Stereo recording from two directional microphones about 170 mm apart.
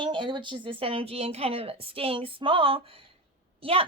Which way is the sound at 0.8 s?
35° right (ahead or behind).